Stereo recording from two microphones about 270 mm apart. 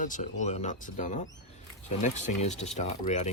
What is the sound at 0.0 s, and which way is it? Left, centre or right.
Speech, left.